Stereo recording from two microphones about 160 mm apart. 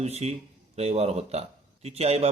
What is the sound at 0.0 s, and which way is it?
Speech, 40° right (ahead or behind).